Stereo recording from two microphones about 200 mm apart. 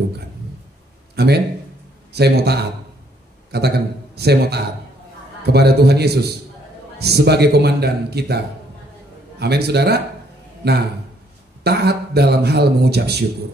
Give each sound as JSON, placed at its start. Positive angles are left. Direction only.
{"t": 1.1, "sound": "a man's voice", "side_deg": -55}
{"t": 9.4, "sound": "a man's voice", "side_deg": -55}